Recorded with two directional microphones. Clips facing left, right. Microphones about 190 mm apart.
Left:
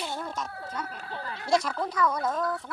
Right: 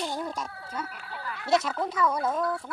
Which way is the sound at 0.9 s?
35° left (ahead or behind).